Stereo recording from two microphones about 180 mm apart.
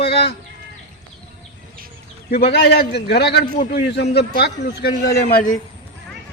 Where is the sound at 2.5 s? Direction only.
65° left (ahead or behind).